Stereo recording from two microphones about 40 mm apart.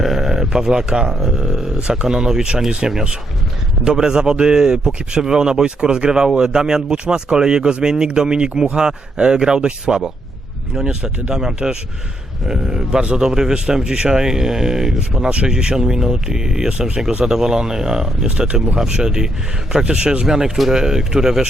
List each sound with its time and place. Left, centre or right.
0.0 s a sound: centre
1.1 s speech: centre
18.3 s speech: right
20.2 s speech: centre